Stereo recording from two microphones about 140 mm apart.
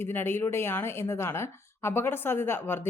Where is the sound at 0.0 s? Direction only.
15° left (ahead or behind).